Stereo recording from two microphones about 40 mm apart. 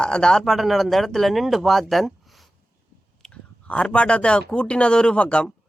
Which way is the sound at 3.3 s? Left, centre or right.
Left.